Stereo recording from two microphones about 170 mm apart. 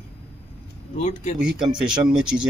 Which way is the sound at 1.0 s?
45° left (ahead or behind).